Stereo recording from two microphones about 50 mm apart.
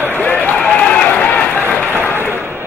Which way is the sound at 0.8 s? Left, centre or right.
Left.